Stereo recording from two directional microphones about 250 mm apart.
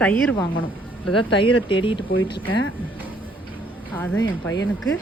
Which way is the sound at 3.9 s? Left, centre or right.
Centre.